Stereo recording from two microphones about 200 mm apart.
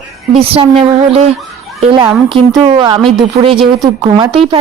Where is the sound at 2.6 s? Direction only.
25° right (ahead or behind).